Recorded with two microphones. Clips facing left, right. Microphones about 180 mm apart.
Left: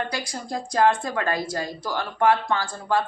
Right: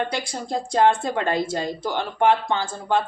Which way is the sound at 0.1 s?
25° right (ahead or behind).